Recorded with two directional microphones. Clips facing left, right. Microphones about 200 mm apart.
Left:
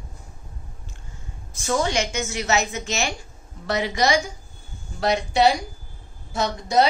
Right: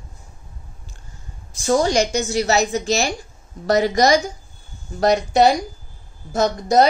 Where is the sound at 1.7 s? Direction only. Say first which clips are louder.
Right 6 dB; 35° right (ahead or behind).